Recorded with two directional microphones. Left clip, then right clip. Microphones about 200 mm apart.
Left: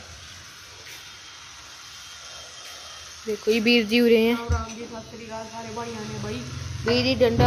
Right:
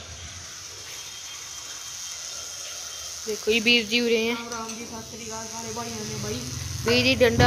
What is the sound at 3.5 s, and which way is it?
Speech, 25° left (ahead or behind).